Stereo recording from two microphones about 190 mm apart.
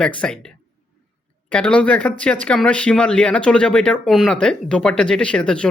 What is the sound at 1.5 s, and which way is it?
Speech, 5° left (ahead or behind).